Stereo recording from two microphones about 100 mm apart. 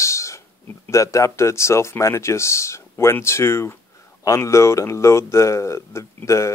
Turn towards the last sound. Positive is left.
turn(degrees=30)  # may be behind; listen again after turning